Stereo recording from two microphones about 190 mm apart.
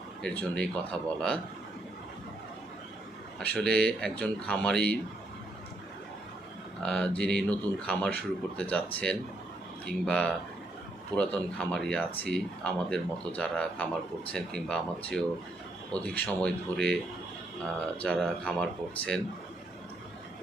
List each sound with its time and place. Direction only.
0.2 s speech: 5° left (ahead or behind)
3.4 s speech: 5° left (ahead or behind)
6.8 s speech: 5° left (ahead or behind)
18.0 s speech: 5° left (ahead or behind)